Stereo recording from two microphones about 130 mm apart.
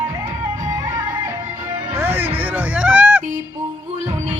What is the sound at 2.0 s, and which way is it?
Music, 15° right (ahead or behind).